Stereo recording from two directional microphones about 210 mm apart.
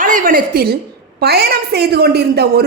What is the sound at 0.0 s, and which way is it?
A woman's voice, 40° right (ahead or behind).